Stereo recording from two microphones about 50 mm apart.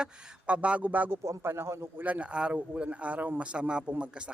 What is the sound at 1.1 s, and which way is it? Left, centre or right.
Speech, right.